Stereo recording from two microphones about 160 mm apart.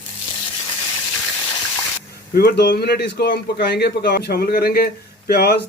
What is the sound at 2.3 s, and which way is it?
A man's voice, 85° left.